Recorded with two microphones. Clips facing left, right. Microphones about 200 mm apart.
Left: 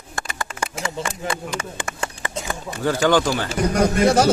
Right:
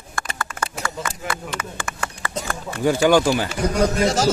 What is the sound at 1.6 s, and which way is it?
Speech, 25° left (ahead or behind).